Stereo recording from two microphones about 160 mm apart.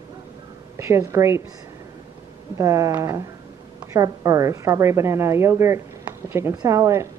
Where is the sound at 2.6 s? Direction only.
20° right (ahead or behind).